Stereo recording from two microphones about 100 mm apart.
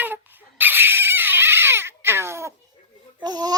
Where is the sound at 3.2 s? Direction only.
45° right (ahead or behind).